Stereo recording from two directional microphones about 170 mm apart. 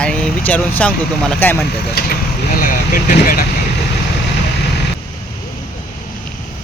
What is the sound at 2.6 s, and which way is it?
Speech, 55° left (ahead or behind).